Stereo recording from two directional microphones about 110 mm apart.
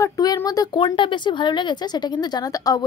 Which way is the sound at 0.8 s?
50° left (ahead or behind).